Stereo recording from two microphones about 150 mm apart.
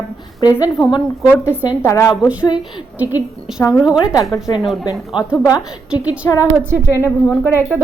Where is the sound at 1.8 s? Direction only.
20° left (ahead or behind).